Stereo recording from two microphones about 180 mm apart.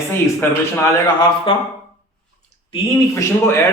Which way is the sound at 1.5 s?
30° left (ahead or behind).